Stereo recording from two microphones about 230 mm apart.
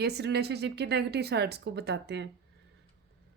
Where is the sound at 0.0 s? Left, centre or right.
Right.